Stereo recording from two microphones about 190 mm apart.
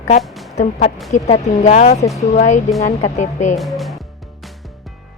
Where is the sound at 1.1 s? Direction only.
35° left (ahead or behind).